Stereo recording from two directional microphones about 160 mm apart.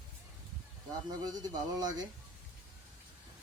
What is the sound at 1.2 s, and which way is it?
Speech, 25° right (ahead or behind).